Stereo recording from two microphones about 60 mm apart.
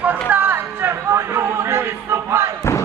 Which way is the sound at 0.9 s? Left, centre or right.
Right.